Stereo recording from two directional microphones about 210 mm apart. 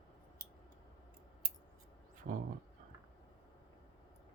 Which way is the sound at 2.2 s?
45° right (ahead or behind).